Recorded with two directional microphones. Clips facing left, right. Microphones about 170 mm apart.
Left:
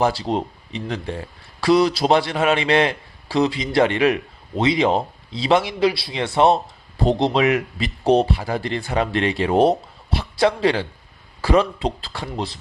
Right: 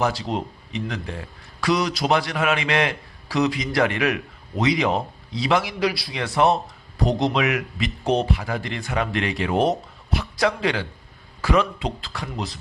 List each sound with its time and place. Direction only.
0.0 s a man's voice: 30° left (ahead or behind)